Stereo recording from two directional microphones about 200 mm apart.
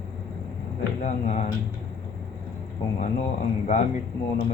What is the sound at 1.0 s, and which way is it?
Speech, 35° left (ahead or behind).